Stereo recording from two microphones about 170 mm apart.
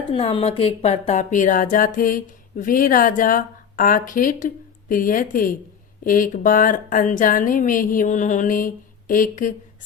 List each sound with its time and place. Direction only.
0.1 s speech: 30° left (ahead or behind); by 9.6 s 50° left (ahead or behind)